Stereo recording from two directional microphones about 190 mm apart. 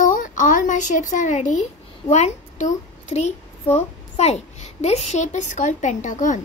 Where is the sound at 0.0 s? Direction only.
45° left (ahead or behind).